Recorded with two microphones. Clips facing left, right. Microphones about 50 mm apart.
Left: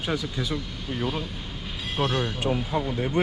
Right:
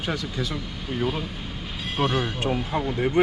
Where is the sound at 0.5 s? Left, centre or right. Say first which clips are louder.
Even; centre.